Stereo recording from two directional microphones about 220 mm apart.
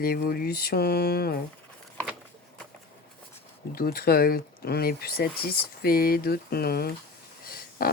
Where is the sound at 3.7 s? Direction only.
45° left (ahead or behind).